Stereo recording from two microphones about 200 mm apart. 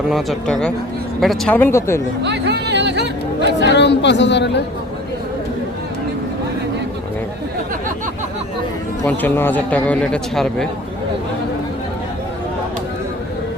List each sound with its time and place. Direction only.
0.1 s a man's voice: centre (ahead or behind)
2.2 s speech: 60° right (ahead or behind)
3.6 s a woman's voice: 60° left (ahead or behind)
9.0 s a man's voice: 10° left (ahead or behind)